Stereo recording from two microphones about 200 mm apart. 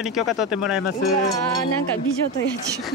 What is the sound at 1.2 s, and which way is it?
Speech, 15° left (ahead or behind).